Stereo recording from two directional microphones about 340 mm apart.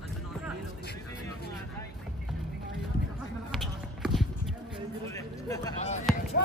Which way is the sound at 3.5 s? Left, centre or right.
Centre.